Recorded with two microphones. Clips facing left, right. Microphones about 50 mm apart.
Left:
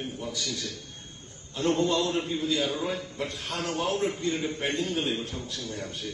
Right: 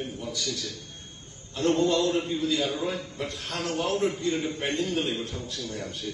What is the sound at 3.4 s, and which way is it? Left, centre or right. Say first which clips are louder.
Speech: right 2 dB; centre.